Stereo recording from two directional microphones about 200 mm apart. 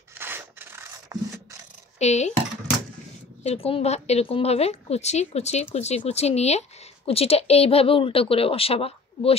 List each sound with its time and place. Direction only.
0.1 s rub: 10° right (ahead or behind)
2.0 s speech: 35° left (ahead or behind)
3.4 s a woman's voice: 30° left (ahead or behind)